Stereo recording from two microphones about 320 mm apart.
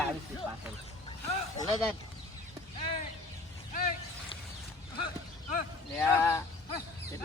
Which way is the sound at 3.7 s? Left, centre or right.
Left.